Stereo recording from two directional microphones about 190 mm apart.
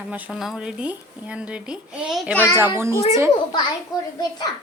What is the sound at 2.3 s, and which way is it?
Speech, 15° left (ahead or behind).